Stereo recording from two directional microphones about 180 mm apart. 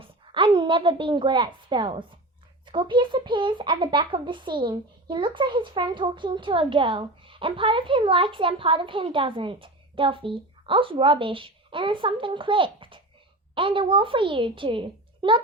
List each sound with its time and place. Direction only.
0.0 s a woman's voice: 30° right (ahead or behind)